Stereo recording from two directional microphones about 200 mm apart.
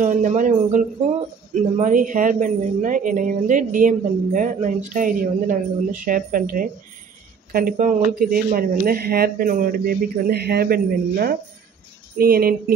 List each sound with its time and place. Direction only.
0.0 s speech: 40° right (ahead or behind)